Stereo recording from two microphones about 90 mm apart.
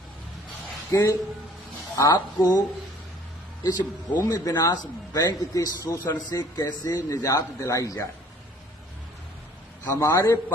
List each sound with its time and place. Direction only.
0.9 s speech: 35° left (ahead or behind)
2.0 s speech: 45° left (ahead or behind)
3.6 s speech: 50° left (ahead or behind)
4.2 s a man's voice: 40° left (ahead or behind)
9.9 s a man's voice: 30° left (ahead or behind)